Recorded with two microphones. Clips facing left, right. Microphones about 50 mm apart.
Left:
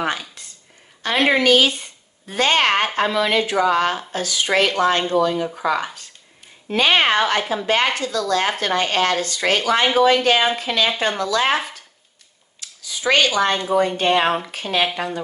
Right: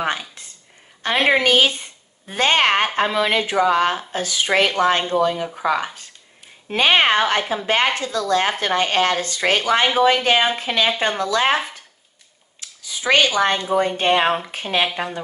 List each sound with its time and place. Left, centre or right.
0.0 s a woman's voice: right
11.5 s speech: centre
12.5 s a sound: right
13.7 s a woman's voice: right